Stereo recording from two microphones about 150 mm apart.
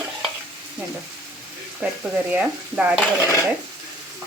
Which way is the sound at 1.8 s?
10° right (ahead or behind).